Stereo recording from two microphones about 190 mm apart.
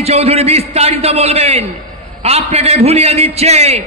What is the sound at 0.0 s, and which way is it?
A man's voice, 35° right (ahead or behind).